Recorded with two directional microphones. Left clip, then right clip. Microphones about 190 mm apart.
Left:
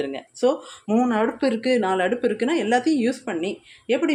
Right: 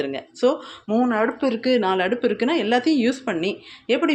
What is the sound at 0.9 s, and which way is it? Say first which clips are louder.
Speech: right 1 dB; 20° left (ahead or behind).